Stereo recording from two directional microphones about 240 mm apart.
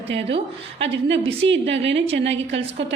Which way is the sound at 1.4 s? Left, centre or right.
Right.